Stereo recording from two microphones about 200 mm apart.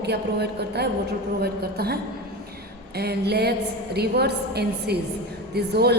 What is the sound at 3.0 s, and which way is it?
A woman's voice, 55° right (ahead or behind).